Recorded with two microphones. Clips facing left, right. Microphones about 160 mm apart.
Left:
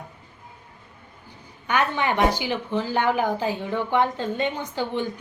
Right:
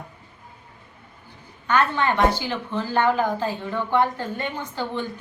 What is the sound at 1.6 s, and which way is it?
A woman's voice, 15° left (ahead or behind).